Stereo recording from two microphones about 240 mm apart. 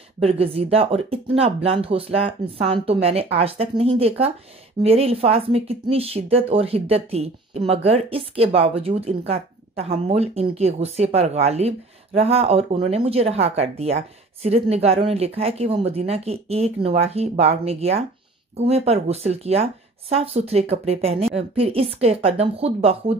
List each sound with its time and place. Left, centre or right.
0.2 s speech: right